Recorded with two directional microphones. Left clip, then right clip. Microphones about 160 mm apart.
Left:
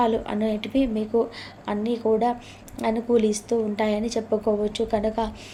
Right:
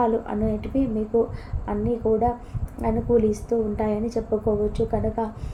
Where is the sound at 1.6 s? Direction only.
45° left (ahead or behind).